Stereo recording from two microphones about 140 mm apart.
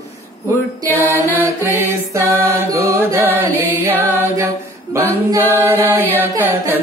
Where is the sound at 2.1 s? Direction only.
15° right (ahead or behind).